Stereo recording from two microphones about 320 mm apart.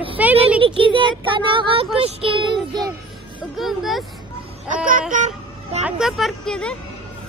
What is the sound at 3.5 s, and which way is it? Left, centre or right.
Speech, centre.